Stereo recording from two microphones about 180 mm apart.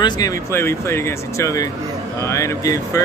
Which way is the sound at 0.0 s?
20° left (ahead or behind).